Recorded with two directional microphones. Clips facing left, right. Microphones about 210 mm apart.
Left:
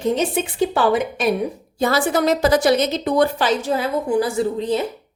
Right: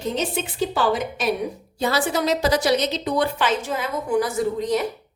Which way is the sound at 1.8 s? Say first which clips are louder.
Left 4 dB; 50° left (ahead or behind).